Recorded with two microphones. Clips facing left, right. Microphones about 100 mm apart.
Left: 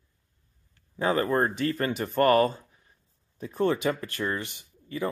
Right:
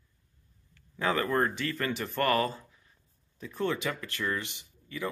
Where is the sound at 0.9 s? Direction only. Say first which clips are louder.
Left 3 dB; 30° left (ahead or behind).